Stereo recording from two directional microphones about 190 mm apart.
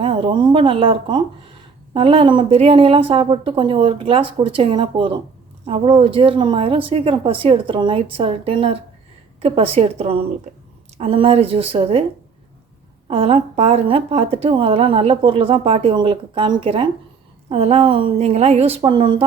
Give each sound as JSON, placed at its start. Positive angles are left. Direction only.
{"t": 0.0, "sound": "a woman's voice", "side_deg": -25}
{"t": 10.9, "sound": "a woman's voice", "side_deg": -30}
{"t": 13.1, "sound": "a woman's voice", "side_deg": -30}